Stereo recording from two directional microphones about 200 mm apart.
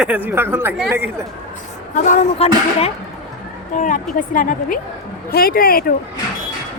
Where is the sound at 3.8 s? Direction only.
40° left (ahead or behind).